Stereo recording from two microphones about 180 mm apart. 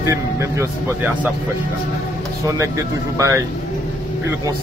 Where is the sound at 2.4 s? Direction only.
15° right (ahead or behind).